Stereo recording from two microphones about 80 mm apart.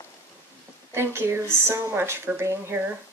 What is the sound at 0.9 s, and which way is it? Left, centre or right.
Speech, right.